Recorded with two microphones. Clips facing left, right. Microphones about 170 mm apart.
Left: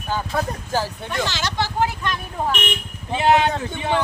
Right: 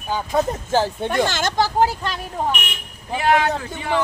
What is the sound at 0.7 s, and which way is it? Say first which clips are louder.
Speech: right 5 dB; 25° right (ahead or behind).